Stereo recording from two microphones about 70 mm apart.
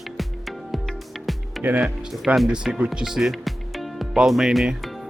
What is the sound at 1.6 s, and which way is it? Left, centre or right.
Speech, right.